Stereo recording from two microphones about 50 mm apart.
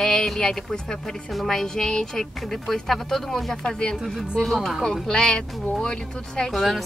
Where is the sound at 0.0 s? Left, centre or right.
Centre.